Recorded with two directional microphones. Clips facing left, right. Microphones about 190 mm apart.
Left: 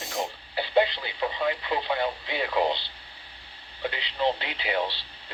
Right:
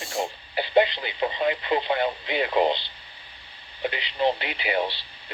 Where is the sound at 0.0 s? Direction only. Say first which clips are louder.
Right 2 dB; 20° left (ahead or behind).